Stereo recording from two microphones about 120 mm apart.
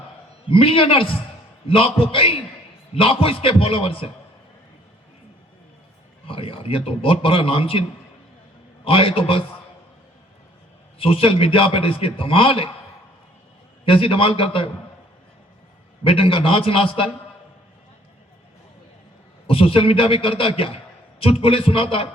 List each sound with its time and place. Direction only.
0.4 s a man's voice: 50° left (ahead or behind)
6.2 s a man's voice: 50° left (ahead or behind)
10.9 s a man's voice: 50° left (ahead or behind)
13.8 s a man's voice: 50° left (ahead or behind)
16.0 s a man's voice: 50° left (ahead or behind)
19.5 s a man's voice: 50° left (ahead or behind)